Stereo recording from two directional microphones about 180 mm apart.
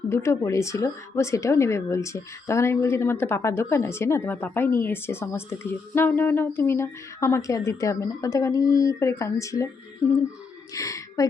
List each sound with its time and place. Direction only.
0.1 s speech: 15° left (ahead or behind)
10.8 s speech: 20° left (ahead or behind)